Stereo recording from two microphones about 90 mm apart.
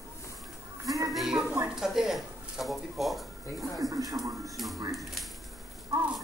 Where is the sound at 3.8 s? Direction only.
40° right (ahead or behind).